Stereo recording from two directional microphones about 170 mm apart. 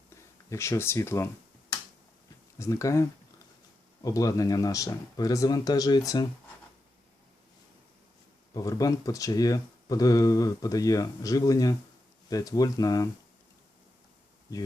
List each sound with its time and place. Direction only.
0.1 s speech: 15° left (ahead or behind)
2.6 s speech: 20° left (ahead or behind)
8.5 s speech: 20° left (ahead or behind)